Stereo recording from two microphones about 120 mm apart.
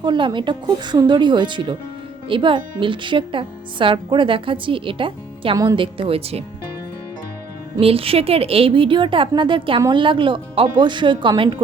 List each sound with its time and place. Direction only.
0.0 s a woman's voice: 40° right (ahead or behind)
7.8 s a woman's voice: 55° right (ahead or behind)